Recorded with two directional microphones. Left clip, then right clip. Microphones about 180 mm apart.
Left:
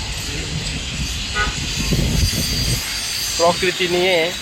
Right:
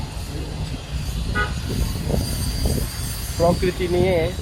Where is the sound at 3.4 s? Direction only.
10° left (ahead or behind).